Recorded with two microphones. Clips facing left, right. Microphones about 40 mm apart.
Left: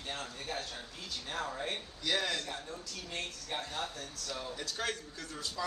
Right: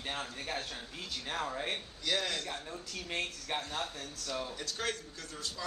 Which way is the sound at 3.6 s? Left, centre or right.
Centre.